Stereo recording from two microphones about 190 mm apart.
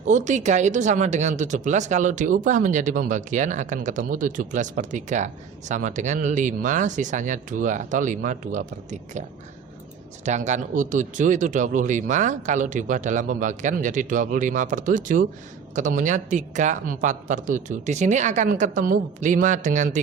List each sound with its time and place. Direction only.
0.1 s speech: 40° right (ahead or behind)
10.2 s speech: 40° right (ahead or behind)